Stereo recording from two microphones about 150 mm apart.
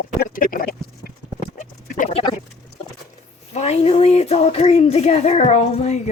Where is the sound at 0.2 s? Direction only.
65° left (ahead or behind); by 1.1 s 85° left.